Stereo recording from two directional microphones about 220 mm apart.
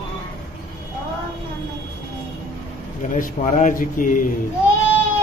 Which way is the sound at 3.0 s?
35° left (ahead or behind).